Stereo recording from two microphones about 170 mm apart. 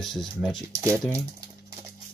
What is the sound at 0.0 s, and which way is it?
Speech, centre (ahead or behind).